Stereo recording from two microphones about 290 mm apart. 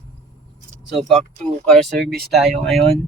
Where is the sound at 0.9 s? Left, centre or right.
Centre.